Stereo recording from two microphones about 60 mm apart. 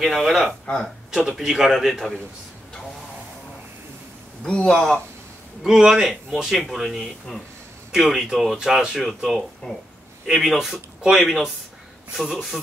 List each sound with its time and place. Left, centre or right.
0.0 s a man's voice: centre
4.4 s a man's voice: centre
5.6 s a man's voice: centre